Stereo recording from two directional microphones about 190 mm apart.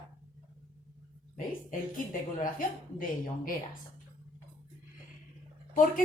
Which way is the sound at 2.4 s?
45° left (ahead or behind).